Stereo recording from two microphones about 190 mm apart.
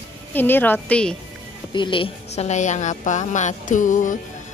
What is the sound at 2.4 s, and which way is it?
Music, 40° left (ahead or behind).